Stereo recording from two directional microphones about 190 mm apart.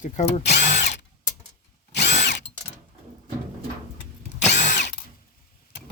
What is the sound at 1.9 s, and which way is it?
Drill, 60° left (ahead or behind).